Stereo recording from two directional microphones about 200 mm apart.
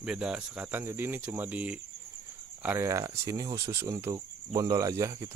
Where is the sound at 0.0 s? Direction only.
5° right (ahead or behind).